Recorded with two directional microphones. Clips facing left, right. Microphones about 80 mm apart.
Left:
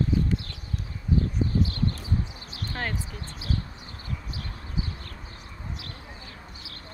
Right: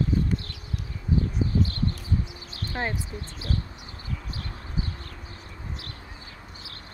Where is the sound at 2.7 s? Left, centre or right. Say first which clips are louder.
Right 2 dB; right.